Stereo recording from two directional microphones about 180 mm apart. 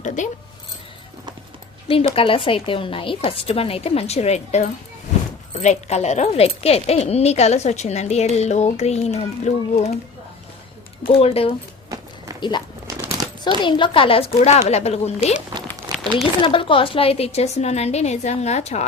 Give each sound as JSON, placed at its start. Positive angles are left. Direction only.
{"t": 0.2, "sound": "speech", "side_deg": 40}
{"t": 2.1, "sound": "a woman's voice", "side_deg": 30}
{"t": 11.2, "sound": "a woman's voice", "side_deg": 35}
{"t": 11.9, "sound": "run", "side_deg": -20}
{"t": 12.4, "sound": "a sound", "side_deg": 25}
{"t": 13.0, "sound": "a sound", "side_deg": -15}
{"t": 13.6, "sound": "a woman's voice", "side_deg": 25}
{"t": 15.9, "sound": "a sound", "side_deg": -20}
{"t": 16.4, "sound": "a woman's voice", "side_deg": 30}